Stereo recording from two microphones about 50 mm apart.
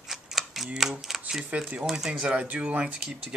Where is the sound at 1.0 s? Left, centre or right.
Centre.